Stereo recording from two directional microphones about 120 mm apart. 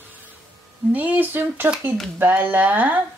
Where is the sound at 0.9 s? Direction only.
15° right (ahead or behind).